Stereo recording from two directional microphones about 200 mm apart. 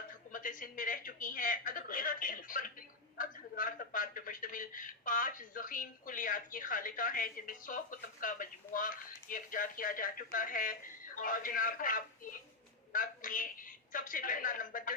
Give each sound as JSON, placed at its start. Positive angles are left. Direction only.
{"t": 0.3, "sound": "a woman's voice", "side_deg": 40}